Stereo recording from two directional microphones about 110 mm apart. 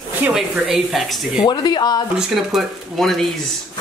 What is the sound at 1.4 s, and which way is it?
Speech, 40° left (ahead or behind).